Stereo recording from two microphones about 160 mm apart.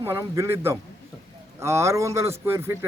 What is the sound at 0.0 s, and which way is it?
Speech, 15° right (ahead or behind).